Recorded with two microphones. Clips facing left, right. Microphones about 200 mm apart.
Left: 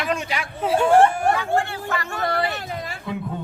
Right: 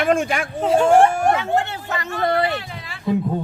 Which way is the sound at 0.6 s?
5° left (ahead or behind).